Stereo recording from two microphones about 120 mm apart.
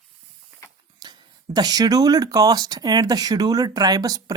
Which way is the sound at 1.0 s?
35° right (ahead or behind).